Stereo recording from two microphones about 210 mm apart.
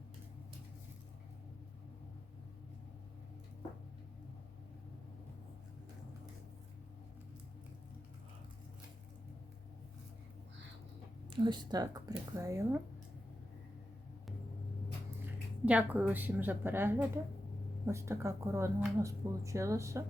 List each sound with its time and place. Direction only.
11.3 s speech: 20° right (ahead or behind)
15.6 s speech: 5° right (ahead or behind)